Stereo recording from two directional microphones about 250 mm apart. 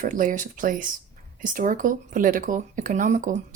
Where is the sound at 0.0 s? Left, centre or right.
Right.